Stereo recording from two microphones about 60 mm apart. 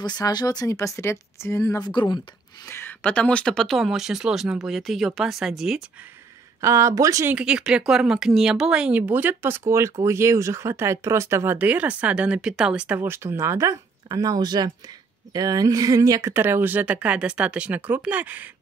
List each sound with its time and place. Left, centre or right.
0.2 s speech: left
2.7 s a sound: left
3.0 s speech: left
3.5 s speech: centre
6.6 s speech: right
7.3 s speech: centre; by 9.6 s right
9.7 s speech: right
11.5 s speech: right; by 12.8 s centre
13.0 s speech: right
16.3 s speech: right